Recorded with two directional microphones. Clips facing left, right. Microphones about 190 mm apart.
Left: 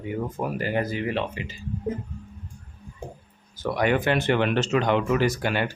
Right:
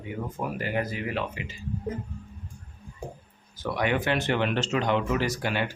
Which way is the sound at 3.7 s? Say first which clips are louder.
Left 4 dB; 50° left (ahead or behind).